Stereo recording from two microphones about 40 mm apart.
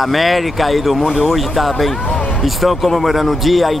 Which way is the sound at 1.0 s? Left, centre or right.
Centre.